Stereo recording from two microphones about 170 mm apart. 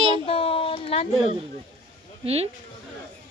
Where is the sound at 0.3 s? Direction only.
35° left (ahead or behind).